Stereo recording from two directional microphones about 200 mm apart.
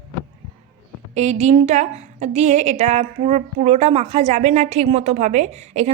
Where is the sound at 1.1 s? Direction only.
35° right (ahead or behind).